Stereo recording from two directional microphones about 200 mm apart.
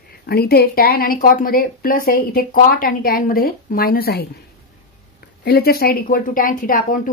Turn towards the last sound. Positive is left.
turn(degrees=40)  # may be behind; listen again after turning